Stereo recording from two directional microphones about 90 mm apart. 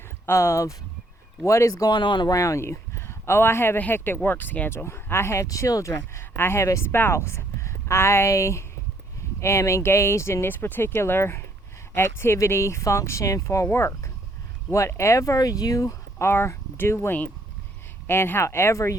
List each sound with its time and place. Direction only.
0.3 s speech: 30° left (ahead or behind)
1.9 s speech: 60° left (ahead or behind)
2.3 s speech: 35° left (ahead or behind)
14.7 s speech: 30° left (ahead or behind)